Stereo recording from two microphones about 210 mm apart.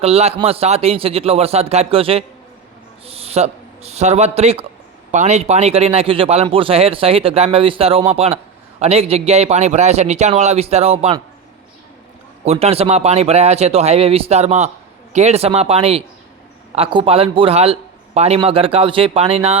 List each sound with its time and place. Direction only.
0.0 s a man's voice: 30° right (ahead or behind)
12.5 s speech: 30° right (ahead or behind)